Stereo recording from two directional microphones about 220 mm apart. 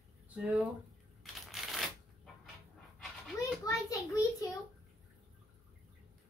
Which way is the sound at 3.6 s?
15° left (ahead or behind).